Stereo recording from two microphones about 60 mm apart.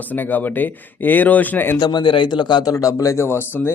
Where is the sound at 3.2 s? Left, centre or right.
Left.